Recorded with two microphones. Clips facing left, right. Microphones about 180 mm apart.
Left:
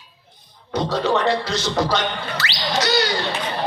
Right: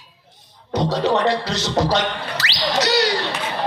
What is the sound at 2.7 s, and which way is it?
Whale vocalization, 35° right (ahead or behind).